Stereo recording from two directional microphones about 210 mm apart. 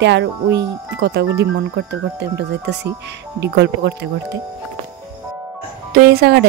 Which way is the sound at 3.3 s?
55° right (ahead or behind).